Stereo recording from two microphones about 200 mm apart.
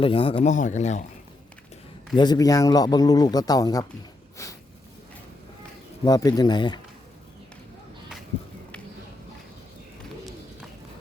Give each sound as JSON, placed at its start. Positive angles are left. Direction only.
{"t": 0.0, "sound": "speech", "side_deg": 25}
{"t": 2.1, "sound": "a man's voice", "side_deg": 20}
{"t": 6.1, "sound": "a man's voice", "side_deg": 20}